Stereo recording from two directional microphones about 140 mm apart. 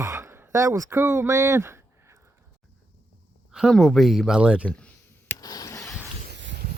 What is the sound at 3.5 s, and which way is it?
Speech, centre (ahead or behind).